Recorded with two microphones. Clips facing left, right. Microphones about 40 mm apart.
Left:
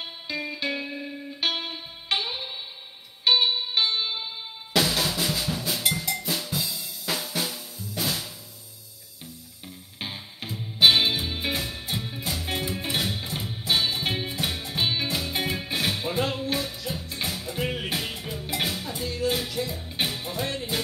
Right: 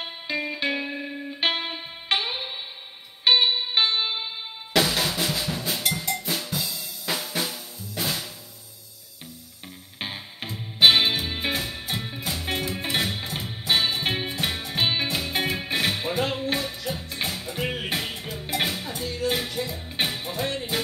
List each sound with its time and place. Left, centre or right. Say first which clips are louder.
0.0 s music: right 3 dB; centre
4.7 s drum: right 1 dB; centre
6.0 s drum kit: right 1 dB; centre
9.9 s music: right 2 dB; centre
18.9 s music: even; centre
19.2 s music: even; centre